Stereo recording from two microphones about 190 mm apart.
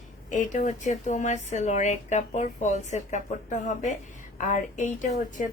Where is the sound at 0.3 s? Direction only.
40° left (ahead or behind).